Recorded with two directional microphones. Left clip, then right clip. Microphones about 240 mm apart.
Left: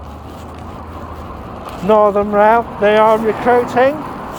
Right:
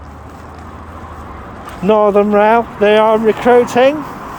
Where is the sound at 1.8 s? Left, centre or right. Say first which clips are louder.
Right 1 dB; right.